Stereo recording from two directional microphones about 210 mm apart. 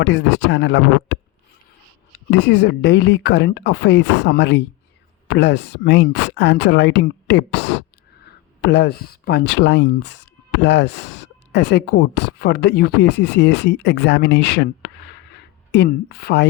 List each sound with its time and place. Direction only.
0.0 s speech: 55° left (ahead or behind)
2.3 s speech: 55° left (ahead or behind)